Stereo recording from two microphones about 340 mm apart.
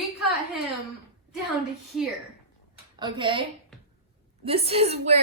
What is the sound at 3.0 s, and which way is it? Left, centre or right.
Speech, centre.